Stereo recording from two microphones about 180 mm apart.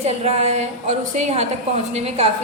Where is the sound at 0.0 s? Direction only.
35° right (ahead or behind).